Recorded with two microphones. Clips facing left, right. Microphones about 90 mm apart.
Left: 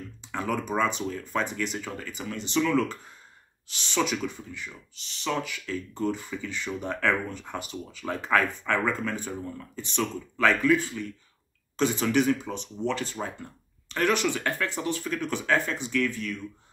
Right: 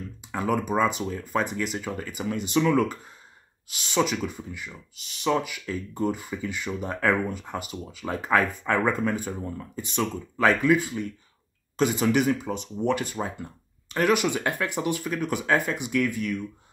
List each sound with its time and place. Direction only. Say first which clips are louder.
0.3 s speech: right 3 dB; 10° right (ahead or behind)
3.7 s speech: right 3 dB; 5° right (ahead or behind)